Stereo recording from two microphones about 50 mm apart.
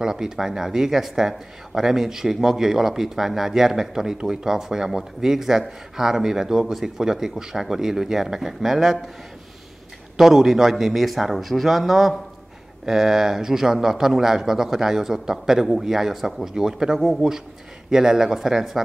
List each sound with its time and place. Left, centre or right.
0.0 s a man's voice: centre
10.1 s a man's voice: centre